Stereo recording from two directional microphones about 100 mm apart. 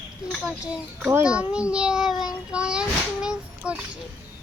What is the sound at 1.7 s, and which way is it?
Child singing, 10° right (ahead or behind).